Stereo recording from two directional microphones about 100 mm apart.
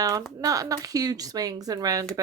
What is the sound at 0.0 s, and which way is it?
Speech, 35° right (ahead or behind).